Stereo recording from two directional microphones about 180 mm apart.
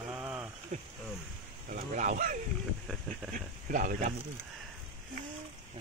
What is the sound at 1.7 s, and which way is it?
Speech, 45° right (ahead or behind).